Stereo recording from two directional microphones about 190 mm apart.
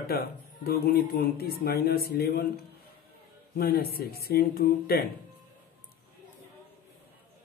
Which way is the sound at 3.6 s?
55° left (ahead or behind).